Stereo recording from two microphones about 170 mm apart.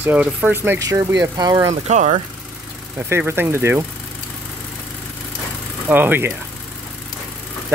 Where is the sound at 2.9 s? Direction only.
15° right (ahead or behind).